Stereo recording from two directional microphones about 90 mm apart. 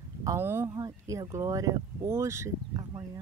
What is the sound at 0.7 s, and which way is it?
Speech, 40° right (ahead or behind).